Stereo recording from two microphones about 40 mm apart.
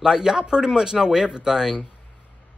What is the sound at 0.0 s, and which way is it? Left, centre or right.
Speech, centre.